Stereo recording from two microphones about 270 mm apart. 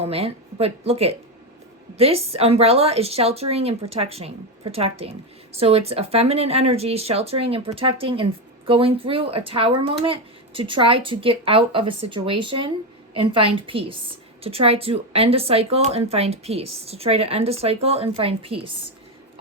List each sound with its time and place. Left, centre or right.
0.0 s a woman's voice: right